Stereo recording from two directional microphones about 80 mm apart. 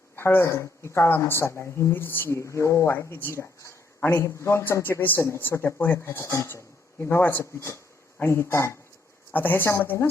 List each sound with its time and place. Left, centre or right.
0.2 s speech: left
2.3 s speech: left
3.2 s a woman's voice: left
3.6 s a sound: left
4.1 s a woman's voice: left
9.3 s a woman's voice: left